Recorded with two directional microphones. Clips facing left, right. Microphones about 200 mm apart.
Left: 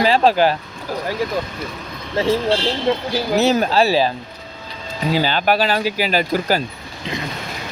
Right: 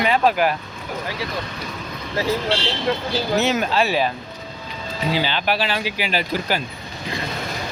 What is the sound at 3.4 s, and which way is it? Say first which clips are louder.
Speech: left 5 dB; 35° left (ahead or behind).